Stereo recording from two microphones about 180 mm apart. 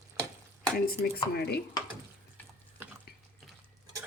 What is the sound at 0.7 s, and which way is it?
Speech, 55° left (ahead or behind).